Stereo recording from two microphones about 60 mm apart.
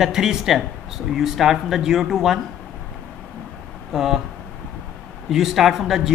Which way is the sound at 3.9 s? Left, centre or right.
Centre.